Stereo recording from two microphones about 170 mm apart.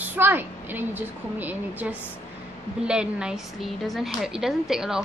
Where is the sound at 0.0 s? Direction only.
10° right (ahead or behind).